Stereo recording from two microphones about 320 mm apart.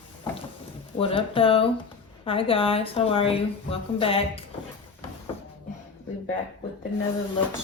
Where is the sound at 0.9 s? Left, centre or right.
Centre.